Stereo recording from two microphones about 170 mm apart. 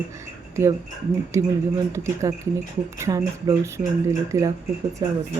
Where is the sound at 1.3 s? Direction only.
15° right (ahead or behind).